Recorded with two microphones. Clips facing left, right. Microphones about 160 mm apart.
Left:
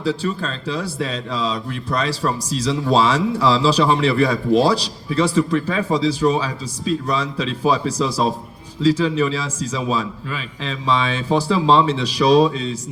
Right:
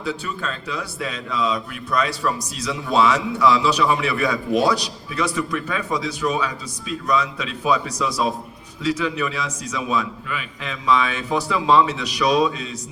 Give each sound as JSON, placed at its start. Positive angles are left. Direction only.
{"t": 0.0, "sound": "a man's voice", "side_deg": 30}